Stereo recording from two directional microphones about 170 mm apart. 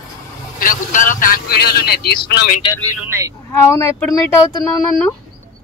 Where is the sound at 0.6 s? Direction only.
50° left (ahead or behind); by 2.1 s 65° left (ahead or behind).